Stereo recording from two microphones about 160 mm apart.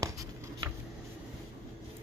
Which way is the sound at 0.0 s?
20° right (ahead or behind).